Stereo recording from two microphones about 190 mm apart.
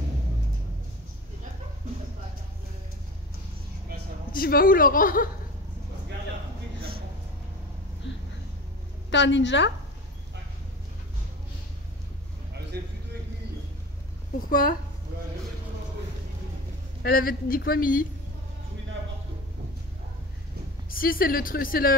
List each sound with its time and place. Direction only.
4.3 s speech: 50° left (ahead or behind)
9.1 s a woman's voice: 70° left (ahead or behind)
12.7 s a sound: 55° right (ahead or behind)
14.5 s speech: 50° left (ahead or behind)
17.0 s speech: 50° left (ahead or behind)
20.9 s speech: 50° left (ahead or behind)